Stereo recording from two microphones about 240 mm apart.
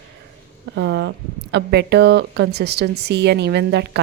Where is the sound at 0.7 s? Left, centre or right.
Right.